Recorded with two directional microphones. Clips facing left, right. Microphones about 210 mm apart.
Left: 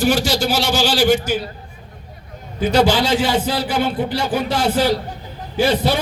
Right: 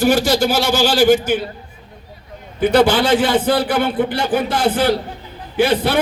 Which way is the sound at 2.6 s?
55° right (ahead or behind).